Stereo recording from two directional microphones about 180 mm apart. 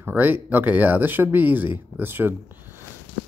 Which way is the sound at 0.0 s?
10° right (ahead or behind).